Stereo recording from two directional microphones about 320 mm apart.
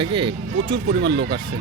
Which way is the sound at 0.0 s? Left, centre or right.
Centre.